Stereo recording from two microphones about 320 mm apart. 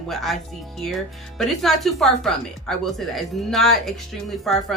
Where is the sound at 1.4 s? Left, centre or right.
Centre.